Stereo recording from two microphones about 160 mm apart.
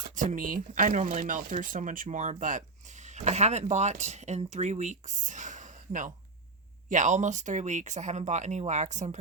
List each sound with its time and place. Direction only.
0.0 s speech: 50° right (ahead or behind)